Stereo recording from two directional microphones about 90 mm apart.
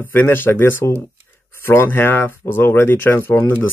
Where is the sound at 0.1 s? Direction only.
25° left (ahead or behind).